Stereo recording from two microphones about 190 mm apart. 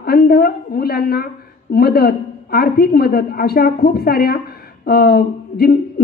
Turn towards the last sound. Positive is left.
turn(degrees=55)  # may be behind; listen again after turning